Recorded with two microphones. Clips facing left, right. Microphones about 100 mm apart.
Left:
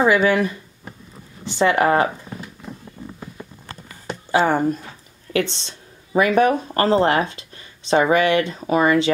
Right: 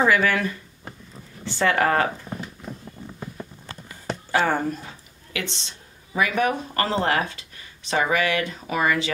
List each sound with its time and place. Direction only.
0.0 s speech: 20° left (ahead or behind)
4.5 s speech: 20° left (ahead or behind)
5.3 s speech: 35° left (ahead or behind)